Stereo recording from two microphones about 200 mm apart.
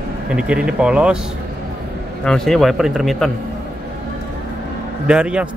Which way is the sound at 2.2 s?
Centre (ahead or behind).